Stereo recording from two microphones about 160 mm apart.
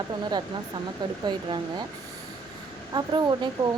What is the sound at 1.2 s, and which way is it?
Speech, 30° right (ahead or behind).